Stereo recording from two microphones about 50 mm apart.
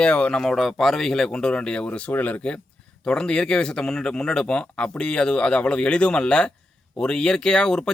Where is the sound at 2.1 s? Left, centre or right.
Left.